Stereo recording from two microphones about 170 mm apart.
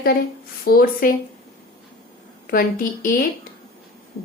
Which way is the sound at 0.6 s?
60° left (ahead or behind).